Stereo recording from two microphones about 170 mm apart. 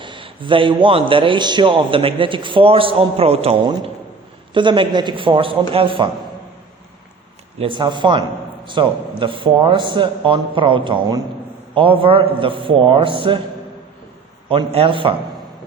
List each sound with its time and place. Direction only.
0.0 s a man's voice: 30° right (ahead or behind)
7.6 s a man's voice: 30° right (ahead or behind)
14.5 s a man's voice: 35° right (ahead or behind)